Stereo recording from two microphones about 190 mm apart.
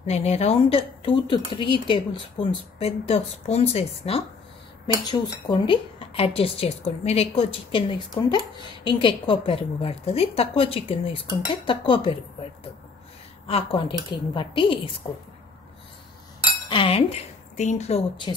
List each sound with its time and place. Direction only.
0.0 s a woman's voice: 35° left (ahead or behind)
13.5 s a woman's voice: 30° left (ahead or behind)
16.6 s cutlery: 25° left (ahead or behind)
17.6 s speech: 35° left (ahead or behind)